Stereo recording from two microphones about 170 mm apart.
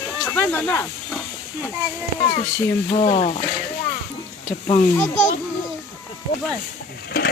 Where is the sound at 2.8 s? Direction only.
35° left (ahead or behind).